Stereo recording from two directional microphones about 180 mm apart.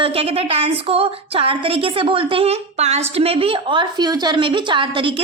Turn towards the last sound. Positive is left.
turn(degrees=-30)  # may be behind; listen again after turning